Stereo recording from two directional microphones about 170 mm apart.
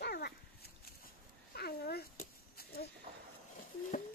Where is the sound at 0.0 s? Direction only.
70° left (ahead or behind).